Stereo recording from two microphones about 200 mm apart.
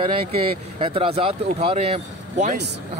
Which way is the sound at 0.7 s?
25° right (ahead or behind).